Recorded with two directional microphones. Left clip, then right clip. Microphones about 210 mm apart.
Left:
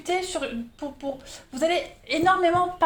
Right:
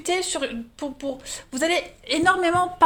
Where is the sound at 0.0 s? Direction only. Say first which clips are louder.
Right 2 dB; 50° right (ahead or behind).